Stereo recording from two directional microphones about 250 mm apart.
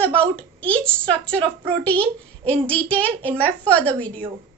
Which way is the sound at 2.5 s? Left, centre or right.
Centre.